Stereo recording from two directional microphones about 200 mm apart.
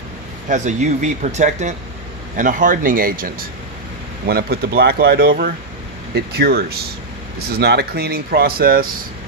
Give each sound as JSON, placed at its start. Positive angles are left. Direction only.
{"t": 0.4, "sound": "speech", "side_deg": -35}